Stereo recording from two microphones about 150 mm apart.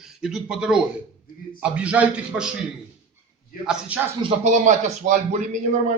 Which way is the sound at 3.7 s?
10° right (ahead or behind).